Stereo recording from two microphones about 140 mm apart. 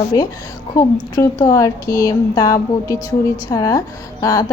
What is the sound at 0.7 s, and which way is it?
A woman's voice, 25° left (ahead or behind).